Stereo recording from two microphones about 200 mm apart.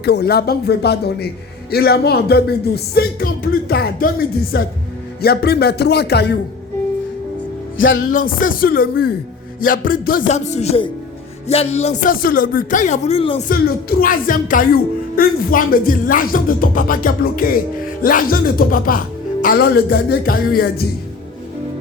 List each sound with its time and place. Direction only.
0.0 s speech: 55° left (ahead or behind)
8.0 s speech: 45° left (ahead or behind)
12.1 s speech: 45° left (ahead or behind); by 13.4 s 30° left (ahead or behind)
13.5 s speech: 45° left (ahead or behind)